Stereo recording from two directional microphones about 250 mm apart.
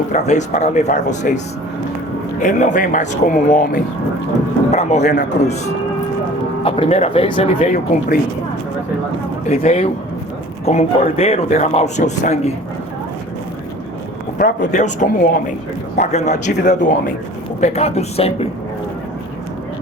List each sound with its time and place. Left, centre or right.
0.1 s speech: left
2.4 s speech: left
6.6 s speech: left
9.5 s speech: left
14.3 s speech: left